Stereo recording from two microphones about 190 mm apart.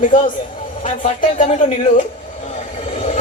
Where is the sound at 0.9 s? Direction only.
35° left (ahead or behind).